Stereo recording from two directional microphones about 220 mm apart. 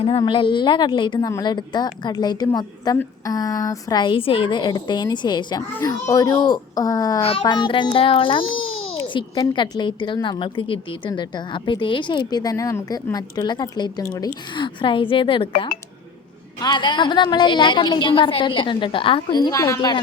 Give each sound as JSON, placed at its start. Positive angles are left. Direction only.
{"t": 0.0, "sound": "a woman's voice", "side_deg": 25}
{"t": 7.2, "sound": "a woman's voice", "side_deg": 25}
{"t": 8.6, "sound": "a sound", "side_deg": 65}
{"t": 9.0, "sound": "a woman's voice", "side_deg": 20}
{"t": 16.6, "sound": "a woman's voice", "side_deg": 20}